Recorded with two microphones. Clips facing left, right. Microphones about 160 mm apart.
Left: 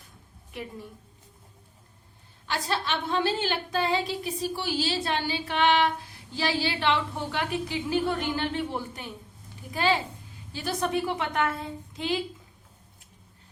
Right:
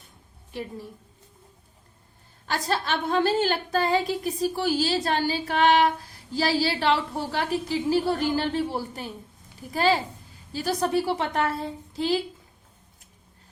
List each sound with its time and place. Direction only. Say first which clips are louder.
0.5 s a woman's voice: right 4 dB; 30° right (ahead or behind)
2.5 s a woman's voice: right 3 dB; 45° right (ahead or behind)